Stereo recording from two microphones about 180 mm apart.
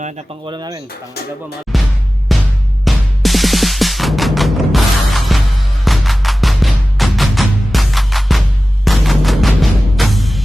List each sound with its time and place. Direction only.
0.4 s speech: 25° right (ahead or behind)
1.7 s music: centre (ahead or behind)